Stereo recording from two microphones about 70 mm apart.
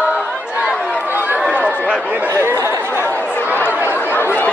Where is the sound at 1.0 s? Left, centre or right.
Right.